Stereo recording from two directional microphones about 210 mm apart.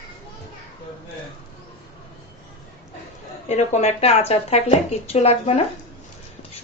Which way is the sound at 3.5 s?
30° left (ahead or behind).